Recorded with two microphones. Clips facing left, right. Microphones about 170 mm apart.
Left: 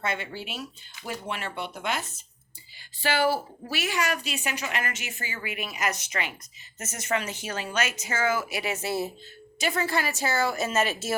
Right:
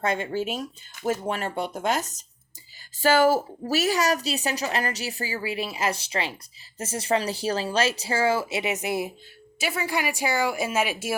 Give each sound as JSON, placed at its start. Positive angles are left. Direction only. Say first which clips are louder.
{"t": 0.0, "sound": "a woman's voice", "louder": "right 6 dB", "side_deg": -40}